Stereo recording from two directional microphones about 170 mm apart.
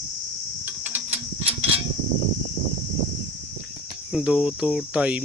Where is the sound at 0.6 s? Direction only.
10° right (ahead or behind).